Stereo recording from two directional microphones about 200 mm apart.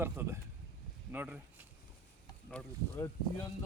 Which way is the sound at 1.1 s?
10° right (ahead or behind).